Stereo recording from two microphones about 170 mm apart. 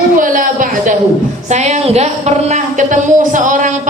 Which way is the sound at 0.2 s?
50° right (ahead or behind).